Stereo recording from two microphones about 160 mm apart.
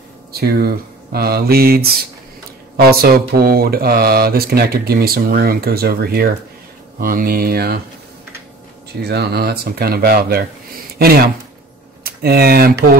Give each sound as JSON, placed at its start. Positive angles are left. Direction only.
{"t": 0.3, "sound": "mantra", "side_deg": -75}
{"t": 9.0, "sound": "mantra", "side_deg": -85}
{"t": 11.0, "sound": "speech", "side_deg": -70}